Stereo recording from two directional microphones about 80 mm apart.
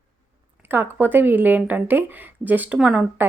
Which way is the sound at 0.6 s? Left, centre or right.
Right.